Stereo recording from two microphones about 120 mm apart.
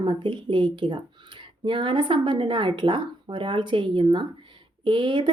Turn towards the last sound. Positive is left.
turn(degrees=-40)  # may be behind; listen again after turning